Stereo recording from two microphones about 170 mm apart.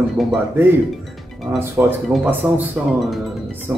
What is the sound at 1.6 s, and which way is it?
Speech, 15° right (ahead or behind).